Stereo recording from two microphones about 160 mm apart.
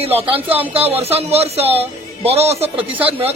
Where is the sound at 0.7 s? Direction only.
35° right (ahead or behind).